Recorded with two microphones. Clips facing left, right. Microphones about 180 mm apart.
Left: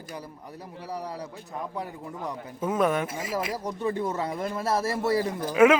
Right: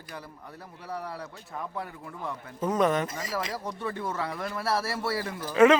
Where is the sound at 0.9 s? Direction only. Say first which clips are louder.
Left 1 dB; 15° left (ahead or behind).